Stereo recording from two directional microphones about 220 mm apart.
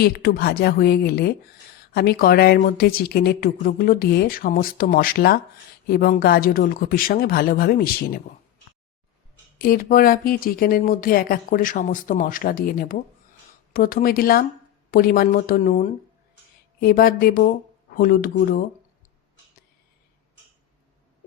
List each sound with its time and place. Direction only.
0.0 s a woman's voice: 45° left (ahead or behind)
9.6 s speech: 40° left (ahead or behind)